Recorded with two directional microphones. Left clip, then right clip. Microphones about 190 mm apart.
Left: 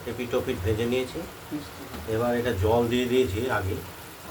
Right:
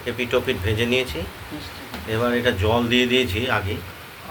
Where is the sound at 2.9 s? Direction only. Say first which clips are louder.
Right 5 dB; 25° right (ahead or behind).